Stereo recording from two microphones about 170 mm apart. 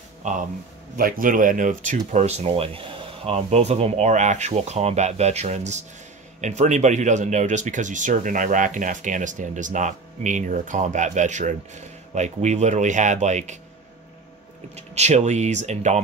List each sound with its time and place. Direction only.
0.9 s speech: 55° right (ahead or behind)
14.8 s speech: 40° right (ahead or behind)